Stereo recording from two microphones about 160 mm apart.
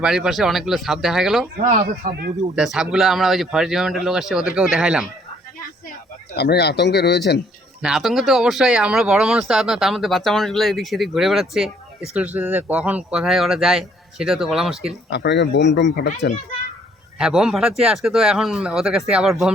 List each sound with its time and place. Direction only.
0.0 s speech: 5° right (ahead or behind)
1.8 s speech: 65° right (ahead or behind)
2.6 s speech: 5° right (ahead or behind)
6.3 s speech: 90° left
7.8 s speech: 5° right (ahead or behind)
15.1 s speech: 90° left
17.2 s speech: 5° right (ahead or behind)